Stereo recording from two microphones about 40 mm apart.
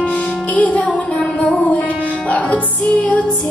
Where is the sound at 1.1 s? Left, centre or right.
Left.